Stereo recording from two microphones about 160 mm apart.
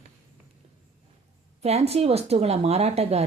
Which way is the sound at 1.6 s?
40° right (ahead or behind).